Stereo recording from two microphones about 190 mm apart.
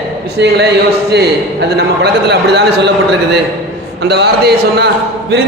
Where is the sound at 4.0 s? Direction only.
60° right (ahead or behind).